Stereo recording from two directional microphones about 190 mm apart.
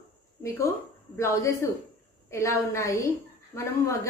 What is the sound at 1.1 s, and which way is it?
A woman's voice, 15° left (ahead or behind).